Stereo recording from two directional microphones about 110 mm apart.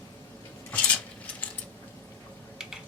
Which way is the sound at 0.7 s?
15° left (ahead or behind).